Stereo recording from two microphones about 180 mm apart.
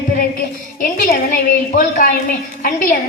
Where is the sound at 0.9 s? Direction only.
50° left (ahead or behind).